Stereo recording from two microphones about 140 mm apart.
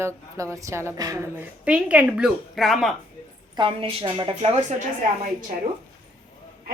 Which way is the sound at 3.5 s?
40° right (ahead or behind).